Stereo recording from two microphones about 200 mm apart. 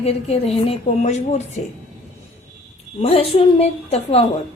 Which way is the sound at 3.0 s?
30° left (ahead or behind).